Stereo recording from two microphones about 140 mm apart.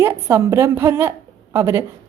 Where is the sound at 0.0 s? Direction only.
15° right (ahead or behind).